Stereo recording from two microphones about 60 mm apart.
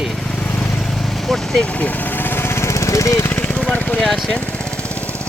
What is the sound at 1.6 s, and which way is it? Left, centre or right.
Lawn mower, left.